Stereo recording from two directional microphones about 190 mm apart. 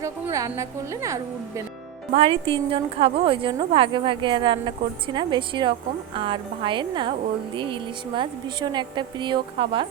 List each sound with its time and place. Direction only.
0.0 s a woman's voice: 15° right (ahead or behind)
2.1 s a woman's voice: 30° right (ahead or behind)